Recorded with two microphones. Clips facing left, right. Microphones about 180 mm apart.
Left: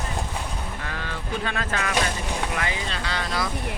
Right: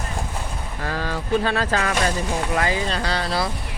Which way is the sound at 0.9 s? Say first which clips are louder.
Right 11 dB; 35° right (ahead or behind).